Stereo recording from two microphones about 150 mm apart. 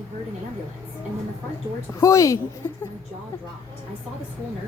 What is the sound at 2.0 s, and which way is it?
Speech, 20° left (ahead or behind).